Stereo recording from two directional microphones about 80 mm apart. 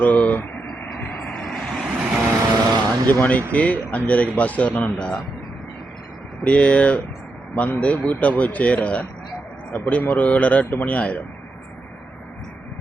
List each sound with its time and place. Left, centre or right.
0.0 s vehicle: left; by 1.9 s centre
2.5 s vehicle: right
3.1 s speech: left
6.4 s speech: centre